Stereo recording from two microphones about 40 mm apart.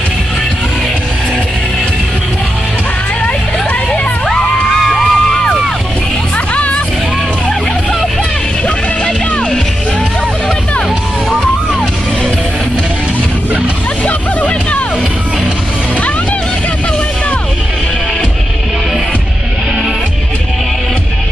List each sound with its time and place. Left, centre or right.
4.3 s music: centre
6.3 s music: left
14.0 s music: left